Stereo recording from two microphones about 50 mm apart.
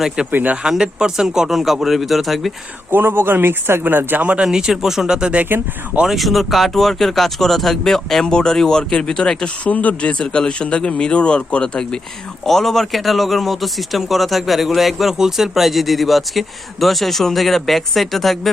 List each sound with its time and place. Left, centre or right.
0.3 s speech: right
0.7 s speech: centre
2.9 s speech: right
4.4 s speech: centre
6.1 s speech: centre
9.6 s speech: left; by 18.5 s centre